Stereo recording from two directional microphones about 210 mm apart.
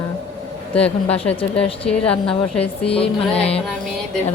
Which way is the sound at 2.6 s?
30° left (ahead or behind).